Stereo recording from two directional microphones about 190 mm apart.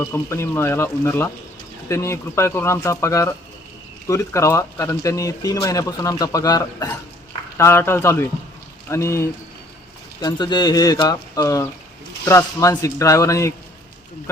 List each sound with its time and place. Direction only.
0.0 s speech: 15° left (ahead or behind)